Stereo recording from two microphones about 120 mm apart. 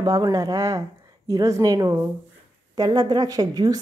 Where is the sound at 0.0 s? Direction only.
30° right (ahead or behind).